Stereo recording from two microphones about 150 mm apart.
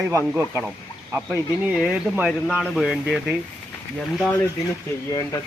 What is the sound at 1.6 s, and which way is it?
Speech, 5° right (ahead or behind).